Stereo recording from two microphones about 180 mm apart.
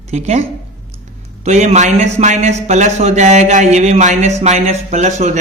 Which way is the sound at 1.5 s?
40° right (ahead or behind).